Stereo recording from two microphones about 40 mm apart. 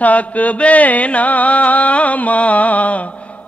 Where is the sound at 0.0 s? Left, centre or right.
Left.